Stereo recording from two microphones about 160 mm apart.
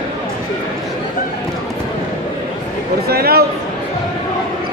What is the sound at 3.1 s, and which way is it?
Speech, 75° right (ahead or behind).